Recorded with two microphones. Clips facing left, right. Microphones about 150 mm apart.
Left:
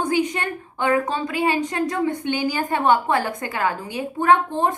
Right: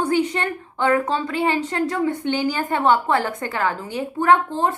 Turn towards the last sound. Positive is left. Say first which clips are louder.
# even
turn(degrees=20)  # may be behind; listen again after turning